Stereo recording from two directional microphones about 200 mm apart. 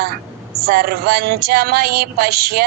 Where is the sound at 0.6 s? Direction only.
50° right (ahead or behind).